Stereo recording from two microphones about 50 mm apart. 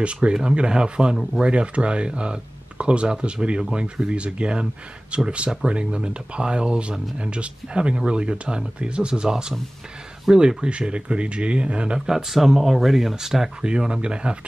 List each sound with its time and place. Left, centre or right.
0.0 s speech: right
12.1 s speech: centre